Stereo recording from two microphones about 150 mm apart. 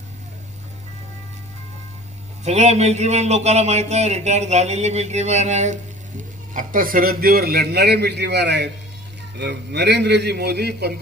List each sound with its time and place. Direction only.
2.4 s a man's voice: 50° right (ahead or behind); by 10.9 s 90° right